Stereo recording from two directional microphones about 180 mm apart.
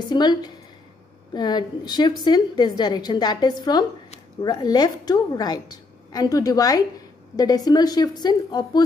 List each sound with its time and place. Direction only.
0.1 s a woman's voice: 25° left (ahead or behind)